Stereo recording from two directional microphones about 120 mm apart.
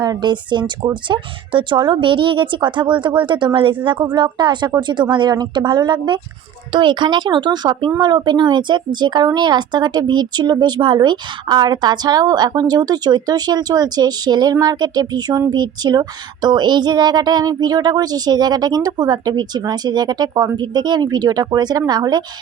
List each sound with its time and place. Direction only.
0.0 s speech: 35° right (ahead or behind)